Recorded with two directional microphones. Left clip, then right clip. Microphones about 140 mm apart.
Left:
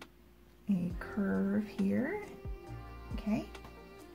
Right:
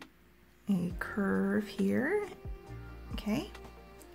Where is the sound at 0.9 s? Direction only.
30° right (ahead or behind).